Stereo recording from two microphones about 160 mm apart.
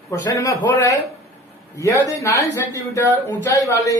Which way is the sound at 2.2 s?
20° left (ahead or behind).